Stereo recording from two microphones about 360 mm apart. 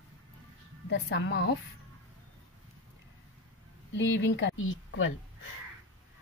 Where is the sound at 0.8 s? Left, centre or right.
Left.